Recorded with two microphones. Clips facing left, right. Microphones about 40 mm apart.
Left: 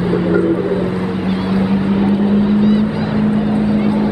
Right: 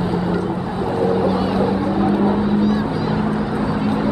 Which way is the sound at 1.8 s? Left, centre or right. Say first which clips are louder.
Left 2 dB; left.